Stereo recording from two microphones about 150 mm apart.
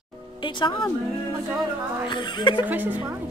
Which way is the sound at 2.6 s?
10° right (ahead or behind).